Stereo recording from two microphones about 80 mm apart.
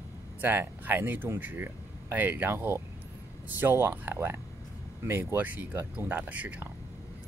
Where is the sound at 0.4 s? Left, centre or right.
Right.